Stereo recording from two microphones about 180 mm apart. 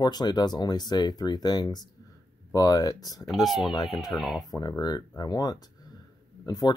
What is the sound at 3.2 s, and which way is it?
Speech, centre (ahead or behind).